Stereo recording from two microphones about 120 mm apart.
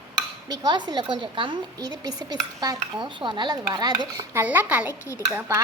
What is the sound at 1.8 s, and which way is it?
A woman's voice, 35° right (ahead or behind).